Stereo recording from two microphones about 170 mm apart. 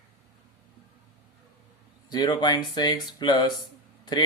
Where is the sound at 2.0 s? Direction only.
25° left (ahead or behind).